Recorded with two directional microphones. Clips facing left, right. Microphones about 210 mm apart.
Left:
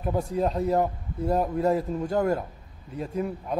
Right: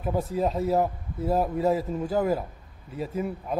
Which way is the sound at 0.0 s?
Centre (ahead or behind).